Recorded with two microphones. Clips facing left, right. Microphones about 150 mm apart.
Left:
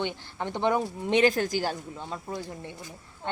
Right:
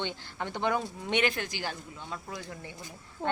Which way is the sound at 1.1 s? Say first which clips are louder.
Left 7 dB; 35° left (ahead or behind).